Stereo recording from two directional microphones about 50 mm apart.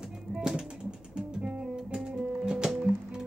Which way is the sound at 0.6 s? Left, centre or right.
Centre.